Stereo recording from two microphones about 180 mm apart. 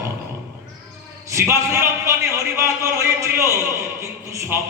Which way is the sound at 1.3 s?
15° right (ahead or behind).